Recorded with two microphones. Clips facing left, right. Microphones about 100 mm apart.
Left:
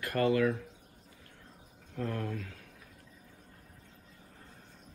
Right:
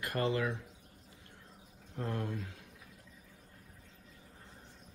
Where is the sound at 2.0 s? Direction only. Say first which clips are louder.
Left 2 dB; 25° right (ahead or behind).